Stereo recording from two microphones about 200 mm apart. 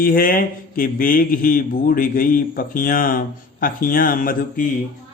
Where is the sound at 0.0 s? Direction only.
45° left (ahead or behind).